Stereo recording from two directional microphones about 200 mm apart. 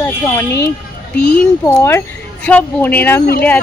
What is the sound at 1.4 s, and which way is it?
Speech, 10° left (ahead or behind).